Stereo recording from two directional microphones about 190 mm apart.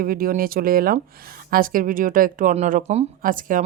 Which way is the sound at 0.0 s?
50° right (ahead or behind).